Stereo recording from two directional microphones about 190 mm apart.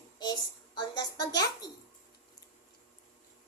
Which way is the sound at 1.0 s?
20° left (ahead or behind).